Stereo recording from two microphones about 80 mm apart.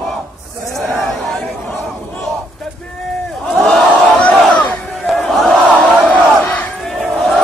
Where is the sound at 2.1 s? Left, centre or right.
Centre.